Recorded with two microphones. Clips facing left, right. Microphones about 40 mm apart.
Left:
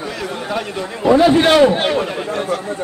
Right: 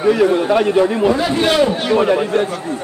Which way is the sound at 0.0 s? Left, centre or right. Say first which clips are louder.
Right 12 dB; right.